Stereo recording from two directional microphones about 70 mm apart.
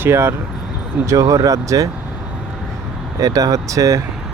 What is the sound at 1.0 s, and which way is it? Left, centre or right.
Speech, right.